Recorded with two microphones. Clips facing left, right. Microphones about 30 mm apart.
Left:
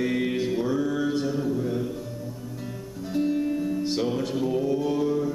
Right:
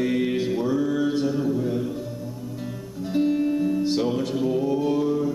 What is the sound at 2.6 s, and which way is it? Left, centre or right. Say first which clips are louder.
Music: right 3 dB; centre.